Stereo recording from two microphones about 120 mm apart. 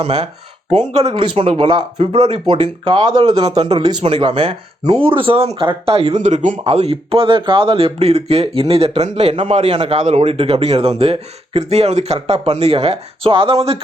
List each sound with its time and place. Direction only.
0.0 s speech: 55° right (ahead or behind)
2.1 s speech: 55° right (ahead or behind); by 3.4 s 35° right (ahead or behind)
3.6 s speech: 45° right (ahead or behind); by 6.6 s 85° right
6.7 s speech: 55° right (ahead or behind)
9.3 s speech: 50° right (ahead or behind)
10.0 s speech: 65° right (ahead or behind)